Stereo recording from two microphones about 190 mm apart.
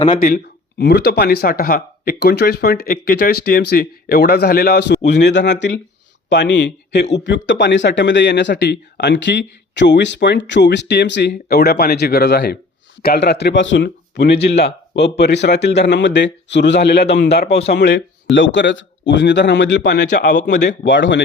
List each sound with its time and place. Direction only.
0.2 s speech: 50° left (ahead or behind); by 20.1 s 65° left (ahead or behind)
20.1 s a man's voice: 40° left (ahead or behind)
20.6 s speech: 65° left (ahead or behind)